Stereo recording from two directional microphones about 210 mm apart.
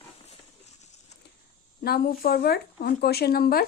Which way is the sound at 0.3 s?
30° left (ahead or behind).